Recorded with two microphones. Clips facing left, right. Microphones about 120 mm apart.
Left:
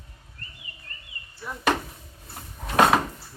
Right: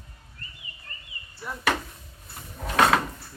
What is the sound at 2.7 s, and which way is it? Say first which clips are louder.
Cupboard open or close: left 2 dB; 15° left (ahead or behind).